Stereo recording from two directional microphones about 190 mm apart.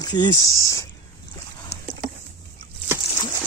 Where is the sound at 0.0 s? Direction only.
20° left (ahead or behind).